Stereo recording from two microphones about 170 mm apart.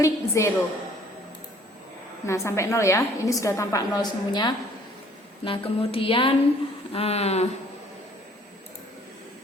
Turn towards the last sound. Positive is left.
turn(degrees=40)  # may be behind; listen again after turning